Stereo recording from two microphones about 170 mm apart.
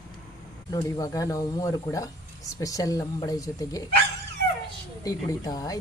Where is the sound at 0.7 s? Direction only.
20° left (ahead or behind).